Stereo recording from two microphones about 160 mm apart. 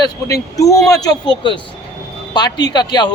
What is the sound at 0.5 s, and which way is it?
Speech, 20° left (ahead or behind).